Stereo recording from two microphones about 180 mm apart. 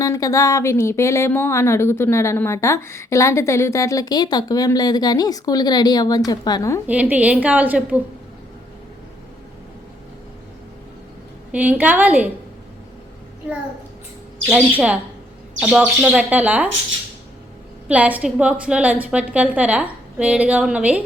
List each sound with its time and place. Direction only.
0.0 s speech: 20° left (ahead or behind)
6.8 s a woman's voice: 10° right (ahead or behind)
11.5 s a woman's voice: 10° right (ahead or behind)
13.4 s a woman's voice: 10° right (ahead or behind)
15.6 s a woman's voice: 5° right (ahead or behind)
17.8 s a woman's voice: 10° right (ahead or behind)